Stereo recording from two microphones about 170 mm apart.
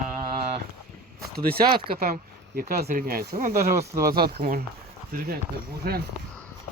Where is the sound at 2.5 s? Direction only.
65° right (ahead or behind).